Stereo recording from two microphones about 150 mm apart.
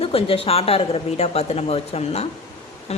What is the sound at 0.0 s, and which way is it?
Speech, 40° left (ahead or behind).